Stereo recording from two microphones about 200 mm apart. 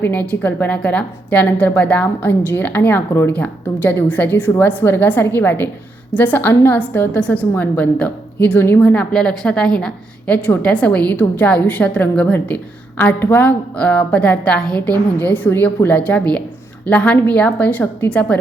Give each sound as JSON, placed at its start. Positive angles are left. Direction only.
{"t": 0.0, "sound": "a woman's voice", "side_deg": 10}